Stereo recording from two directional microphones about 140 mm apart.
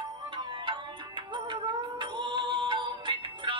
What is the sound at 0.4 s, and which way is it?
Music, 35° right (ahead or behind).